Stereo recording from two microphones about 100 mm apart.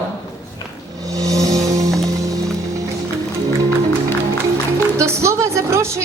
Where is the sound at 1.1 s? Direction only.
35° right (ahead or behind).